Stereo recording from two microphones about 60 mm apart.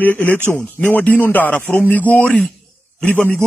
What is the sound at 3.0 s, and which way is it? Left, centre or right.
Speech, left.